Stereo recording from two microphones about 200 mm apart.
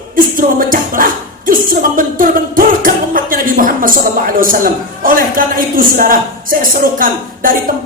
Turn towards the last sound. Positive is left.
turn(degrees=-45)  # may be behind; listen again after turning